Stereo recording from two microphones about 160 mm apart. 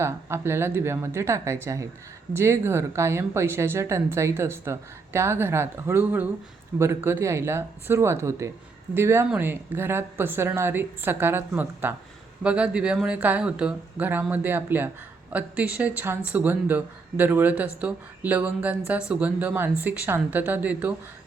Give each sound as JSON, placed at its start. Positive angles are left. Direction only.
{"t": 0.0, "sound": "a woman's voice", "side_deg": -15}